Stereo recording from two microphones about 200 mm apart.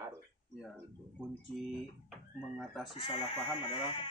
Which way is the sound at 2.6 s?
Centre (ahead or behind).